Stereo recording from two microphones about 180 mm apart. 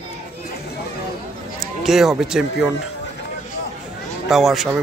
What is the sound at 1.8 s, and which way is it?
Speech, centre (ahead or behind).